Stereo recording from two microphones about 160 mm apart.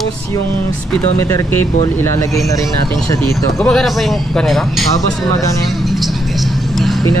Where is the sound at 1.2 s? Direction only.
15° left (ahead or behind).